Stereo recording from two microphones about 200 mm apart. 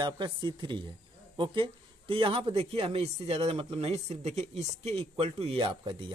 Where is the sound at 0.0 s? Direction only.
20° right (ahead or behind).